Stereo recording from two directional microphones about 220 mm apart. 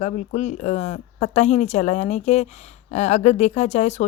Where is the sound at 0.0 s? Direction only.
30° left (ahead or behind).